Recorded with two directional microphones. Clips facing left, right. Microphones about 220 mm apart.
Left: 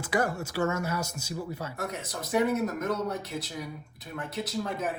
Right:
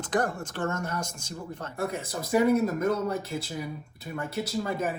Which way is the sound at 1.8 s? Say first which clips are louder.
Right 8 dB; 30° right (ahead or behind).